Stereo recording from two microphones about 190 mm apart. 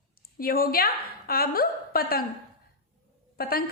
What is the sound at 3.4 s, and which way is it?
Speech, 55° left (ahead or behind).